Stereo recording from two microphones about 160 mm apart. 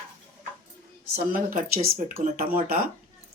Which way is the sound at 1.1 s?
60° right (ahead or behind).